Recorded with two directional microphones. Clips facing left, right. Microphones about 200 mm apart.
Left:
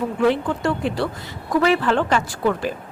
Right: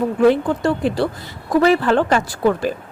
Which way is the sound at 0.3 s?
40° right (ahead or behind).